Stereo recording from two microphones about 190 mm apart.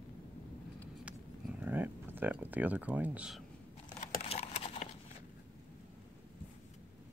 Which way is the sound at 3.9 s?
30° left (ahead or behind).